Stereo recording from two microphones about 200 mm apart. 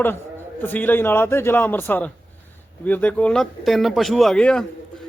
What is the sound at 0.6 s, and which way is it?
A man's voice, 10° left (ahead or behind).